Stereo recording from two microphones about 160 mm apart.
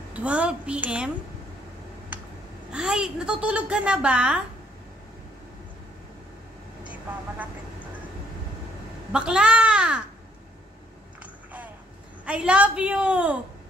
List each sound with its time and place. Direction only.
0.1 s a woman's voice: 10° right (ahead or behind)
2.7 s a woman's voice: 5° right (ahead or behind)
6.8 s vehicle: 10° right (ahead or behind)
9.1 s a child's voice: 5° right (ahead or behind)
12.3 s a woman's voice: 5° right (ahead or behind)